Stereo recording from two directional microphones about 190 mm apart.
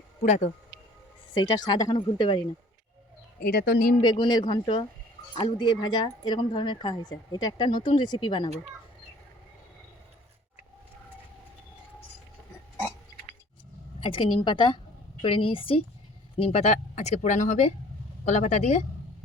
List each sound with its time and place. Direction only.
0.2 s speech: 40° left (ahead or behind)
1.3 s speech: 20° left (ahead or behind)
3.4 s speech: 55° left (ahead or behind)
4.0 s speech: 20° left (ahead or behind)
14.0 s speech: 25° left (ahead or behind)